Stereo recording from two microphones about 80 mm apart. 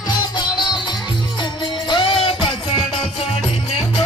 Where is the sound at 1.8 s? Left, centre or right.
Left.